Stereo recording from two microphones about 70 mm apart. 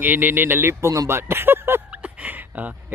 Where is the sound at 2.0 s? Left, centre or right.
Right.